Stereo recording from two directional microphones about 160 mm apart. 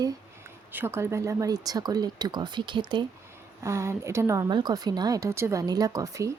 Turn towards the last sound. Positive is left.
turn(degrees=-20)  # may be behind; listen again after turning